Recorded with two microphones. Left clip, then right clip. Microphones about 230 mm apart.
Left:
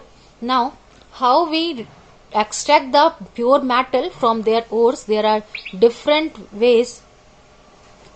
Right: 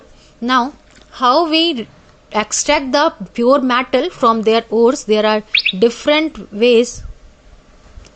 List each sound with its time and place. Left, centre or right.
0.4 s a woman's voice: right